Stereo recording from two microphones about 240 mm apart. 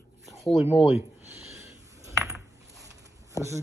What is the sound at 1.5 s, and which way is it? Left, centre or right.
Coin, centre.